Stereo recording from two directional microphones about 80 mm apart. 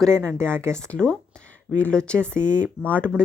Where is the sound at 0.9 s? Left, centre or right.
Centre.